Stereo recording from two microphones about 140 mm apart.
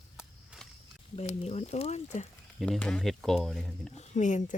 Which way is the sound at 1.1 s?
50° left (ahead or behind).